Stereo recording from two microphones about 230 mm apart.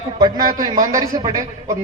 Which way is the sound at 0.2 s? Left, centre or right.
Centre.